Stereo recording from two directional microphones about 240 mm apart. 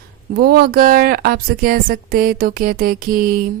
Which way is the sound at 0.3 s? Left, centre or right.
Right.